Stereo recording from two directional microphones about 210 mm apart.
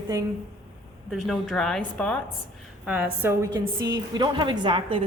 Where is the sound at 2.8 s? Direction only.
5° right (ahead or behind).